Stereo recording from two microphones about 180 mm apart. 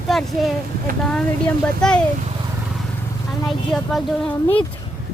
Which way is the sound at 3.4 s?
Centre (ahead or behind).